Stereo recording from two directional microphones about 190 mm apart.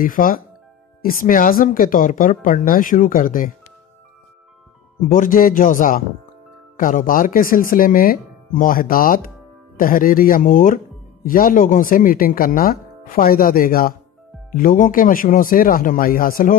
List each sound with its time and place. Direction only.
0.0 s speech: 45° left (ahead or behind)
5.1 s speech: 45° left (ahead or behind)